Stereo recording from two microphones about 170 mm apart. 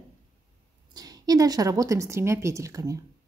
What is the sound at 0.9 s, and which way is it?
A woman's voice, 20° right (ahead or behind).